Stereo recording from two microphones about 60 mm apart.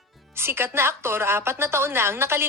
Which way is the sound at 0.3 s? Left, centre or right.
Right.